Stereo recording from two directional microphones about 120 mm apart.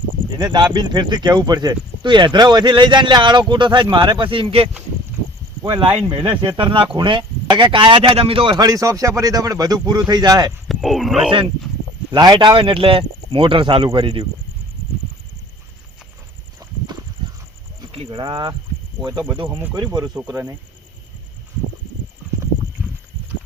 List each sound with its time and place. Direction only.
0.3 s speech: 40° right (ahead or behind)
6.1 s speech: 45° right (ahead or behind)
10.7 s speech: centre (ahead or behind)
11.3 s speech: 45° right (ahead or behind)
17.9 s a sound: 50° right (ahead or behind)
18.2 s speech: 40° right (ahead or behind)
19.0 s speech: 20° right (ahead or behind)